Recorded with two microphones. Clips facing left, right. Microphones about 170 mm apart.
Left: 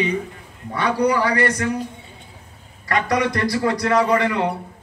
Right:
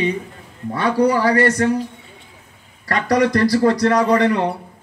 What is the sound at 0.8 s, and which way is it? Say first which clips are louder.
Speech: right 3 dB; 30° right (ahead or behind).